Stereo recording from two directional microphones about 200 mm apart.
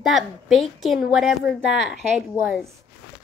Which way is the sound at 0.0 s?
Centre (ahead or behind).